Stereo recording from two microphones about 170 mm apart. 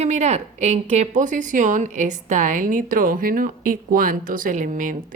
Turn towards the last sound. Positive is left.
turn(degrees=-50)  # may be behind; listen again after turning